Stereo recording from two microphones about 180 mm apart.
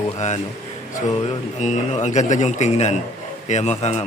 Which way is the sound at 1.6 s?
40° left (ahead or behind).